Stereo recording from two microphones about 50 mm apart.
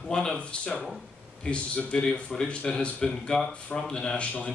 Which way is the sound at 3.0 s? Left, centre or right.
Centre.